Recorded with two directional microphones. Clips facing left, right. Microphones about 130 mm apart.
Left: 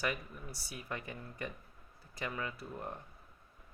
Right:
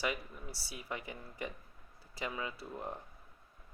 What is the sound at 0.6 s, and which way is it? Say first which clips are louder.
Speech: left 1 dB; 30° right (ahead or behind).